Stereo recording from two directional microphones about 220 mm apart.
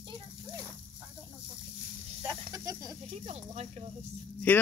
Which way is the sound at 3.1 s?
30° right (ahead or behind).